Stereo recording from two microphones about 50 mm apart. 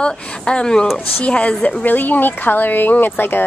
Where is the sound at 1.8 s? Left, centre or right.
Left.